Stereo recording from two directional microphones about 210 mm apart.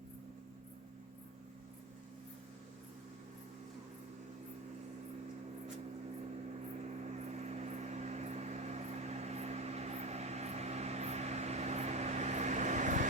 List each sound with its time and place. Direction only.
7.0 s vehicle: 30° right (ahead or behind)